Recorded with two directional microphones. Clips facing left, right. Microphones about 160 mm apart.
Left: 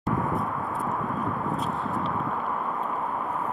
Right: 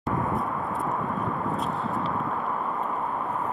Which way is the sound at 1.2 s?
Centre (ahead or behind).